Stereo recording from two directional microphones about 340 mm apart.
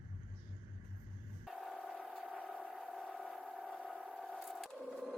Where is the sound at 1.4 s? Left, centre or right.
Centre.